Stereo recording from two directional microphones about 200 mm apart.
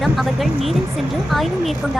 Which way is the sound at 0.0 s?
Centre (ahead or behind).